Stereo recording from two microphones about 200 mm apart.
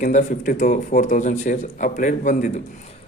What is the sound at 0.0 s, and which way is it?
A man's voice, 40° left (ahead or behind).